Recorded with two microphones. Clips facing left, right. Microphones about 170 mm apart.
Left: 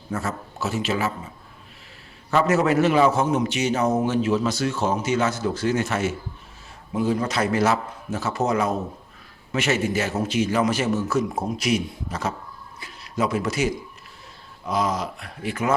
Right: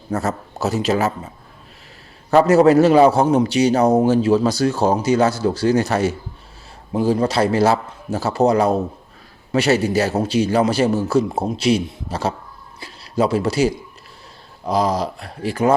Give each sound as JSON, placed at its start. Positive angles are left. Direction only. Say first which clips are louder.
{"t": 0.1, "sound": "a man's voice", "louder": "right 6 dB", "side_deg": -40}
{"t": 2.3, "sound": "a man's voice", "louder": "right 8 dB", "side_deg": -35}